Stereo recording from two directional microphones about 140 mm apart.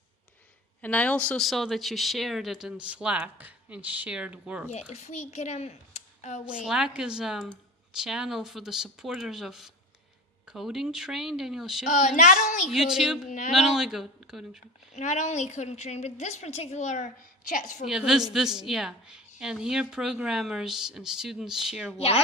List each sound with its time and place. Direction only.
0.8 s speech: 10° left (ahead or behind); by 4.7 s 10° right (ahead or behind)
4.7 s speech: 50° left (ahead or behind)
6.6 s speech: 5° right (ahead or behind)
11.9 s a woman's voice: 65° left (ahead or behind)
12.6 s speech: centre (ahead or behind)
14.9 s a woman's voice: 60° left (ahead or behind)
17.8 s speech: 5° right (ahead or behind)
21.9 s speech: 45° left (ahead or behind)